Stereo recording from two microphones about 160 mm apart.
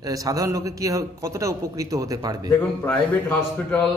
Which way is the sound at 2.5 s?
10° left (ahead or behind).